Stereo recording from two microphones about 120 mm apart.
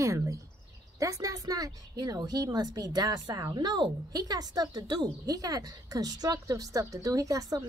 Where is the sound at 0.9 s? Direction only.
25° right (ahead or behind).